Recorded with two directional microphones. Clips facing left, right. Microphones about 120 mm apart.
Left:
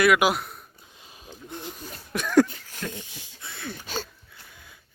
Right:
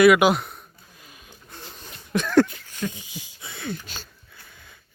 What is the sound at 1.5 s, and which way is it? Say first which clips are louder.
Zipper: left 6 dB; 15° left (ahead or behind).